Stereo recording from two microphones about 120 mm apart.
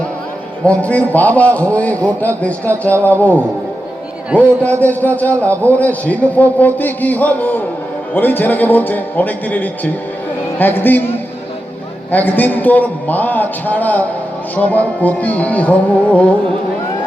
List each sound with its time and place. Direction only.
0.6 s a man's voice: 10° left (ahead or behind)
12.1 s a man's voice: 15° left (ahead or behind)